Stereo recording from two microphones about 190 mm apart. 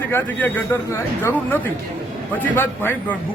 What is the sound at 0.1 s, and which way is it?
A man's voice, 10° left (ahead or behind).